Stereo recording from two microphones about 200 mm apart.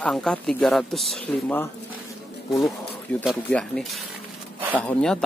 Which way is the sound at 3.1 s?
5° left (ahead or behind).